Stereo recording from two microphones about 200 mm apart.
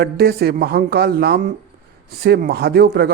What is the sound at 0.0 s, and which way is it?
A man's voice, 50° right (ahead or behind).